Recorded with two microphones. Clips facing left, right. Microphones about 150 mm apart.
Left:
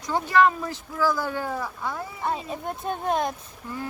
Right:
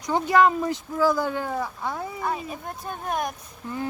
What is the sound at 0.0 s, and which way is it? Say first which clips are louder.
Speech: right 1 dB; 15° right (ahead or behind).